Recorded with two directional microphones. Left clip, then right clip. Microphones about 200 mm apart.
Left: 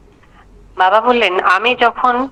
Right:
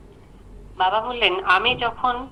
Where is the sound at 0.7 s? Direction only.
65° left (ahead or behind).